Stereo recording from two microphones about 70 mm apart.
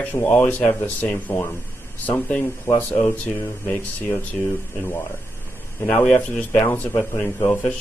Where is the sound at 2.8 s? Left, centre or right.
Left.